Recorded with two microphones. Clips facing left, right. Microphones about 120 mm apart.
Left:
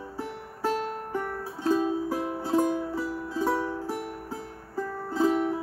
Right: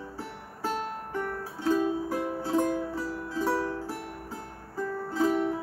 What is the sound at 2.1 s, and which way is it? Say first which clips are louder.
Music: left 1 dB; 10° left (ahead or behind).